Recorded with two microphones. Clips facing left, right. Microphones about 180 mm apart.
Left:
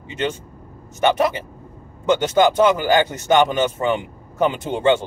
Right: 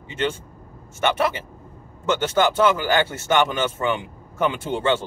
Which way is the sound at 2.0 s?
15° left (ahead or behind).